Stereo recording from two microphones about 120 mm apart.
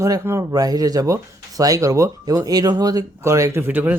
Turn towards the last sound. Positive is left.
turn(degrees=-15)  # may be behind; listen again after turning